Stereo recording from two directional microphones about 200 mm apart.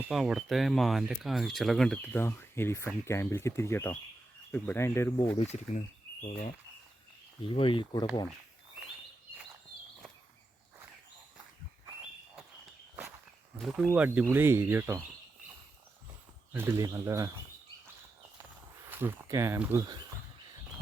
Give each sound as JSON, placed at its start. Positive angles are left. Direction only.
{"t": 0.1, "sound": "speech", "side_deg": 0}
{"t": 7.4, "sound": "speech", "side_deg": 25}
{"t": 13.6, "sound": "speech", "side_deg": 0}
{"t": 16.5, "sound": "speech", "side_deg": -10}
{"t": 18.9, "sound": "speech", "side_deg": -10}